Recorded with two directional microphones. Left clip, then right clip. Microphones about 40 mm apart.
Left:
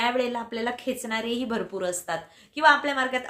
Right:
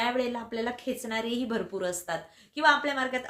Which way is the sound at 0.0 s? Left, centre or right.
Left.